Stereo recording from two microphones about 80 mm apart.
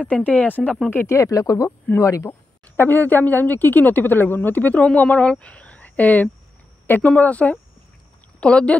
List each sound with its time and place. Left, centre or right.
0.1 s speech: centre
0.8 s speech: left
2.7 s speech: left